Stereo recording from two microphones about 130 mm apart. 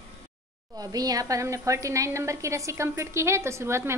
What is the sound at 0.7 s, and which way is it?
A woman's voice, 30° right (ahead or behind).